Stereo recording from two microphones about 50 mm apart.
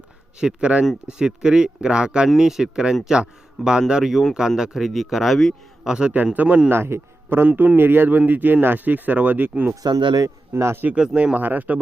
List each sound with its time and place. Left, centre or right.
0.3 s speech: centre
5.8 s speech: centre
6.3 s speech: right
6.7 s a man's voice: right
7.4 s speech: right
10.5 s speech: right
10.9 s speech: right
11.3 s speech: right